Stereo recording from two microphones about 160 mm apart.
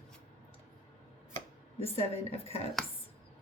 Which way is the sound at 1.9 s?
40° left (ahead or behind).